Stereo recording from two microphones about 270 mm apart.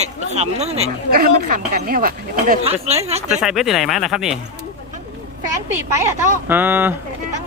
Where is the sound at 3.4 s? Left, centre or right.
Centre.